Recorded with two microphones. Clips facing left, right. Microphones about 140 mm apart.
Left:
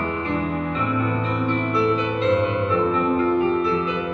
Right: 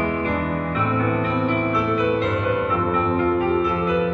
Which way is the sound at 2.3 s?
30° left (ahead or behind).